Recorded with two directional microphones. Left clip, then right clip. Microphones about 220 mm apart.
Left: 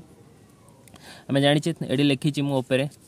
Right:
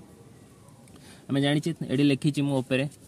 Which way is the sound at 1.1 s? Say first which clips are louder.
Left 6 dB; 20° left (ahead or behind).